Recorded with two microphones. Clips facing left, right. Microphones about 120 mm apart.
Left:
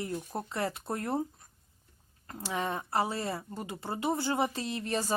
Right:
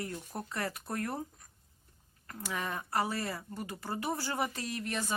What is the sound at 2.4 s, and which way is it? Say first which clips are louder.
Speech: left 4 dB; 25° left (ahead or behind).